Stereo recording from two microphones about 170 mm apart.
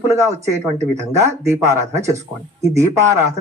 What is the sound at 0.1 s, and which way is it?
Speech, 15° right (ahead or behind).